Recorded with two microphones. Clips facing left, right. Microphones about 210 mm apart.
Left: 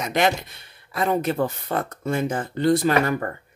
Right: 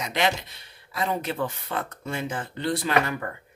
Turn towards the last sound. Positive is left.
turn(degrees=45)  # may be behind; listen again after turning